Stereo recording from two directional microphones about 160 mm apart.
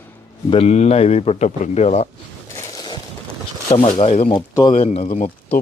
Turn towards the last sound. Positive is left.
turn(degrees=40)  # may be behind; listen again after turning